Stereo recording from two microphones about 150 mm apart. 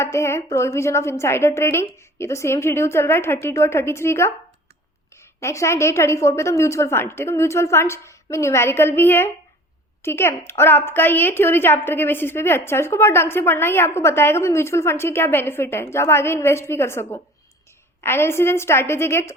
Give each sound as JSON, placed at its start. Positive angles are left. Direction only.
{"t": 0.0, "sound": "a woman's voice", "side_deg": 20}
{"t": 5.4, "sound": "a woman's voice", "side_deg": 20}